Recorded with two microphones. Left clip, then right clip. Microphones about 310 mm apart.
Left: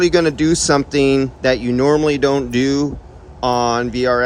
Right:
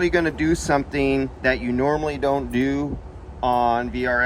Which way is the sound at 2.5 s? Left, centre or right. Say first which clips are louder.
Left 6 dB; left.